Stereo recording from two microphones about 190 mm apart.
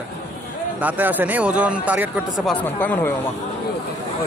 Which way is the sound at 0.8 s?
10° right (ahead or behind).